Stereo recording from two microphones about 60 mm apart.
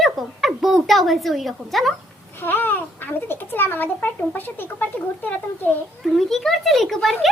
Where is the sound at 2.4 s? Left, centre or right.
Left.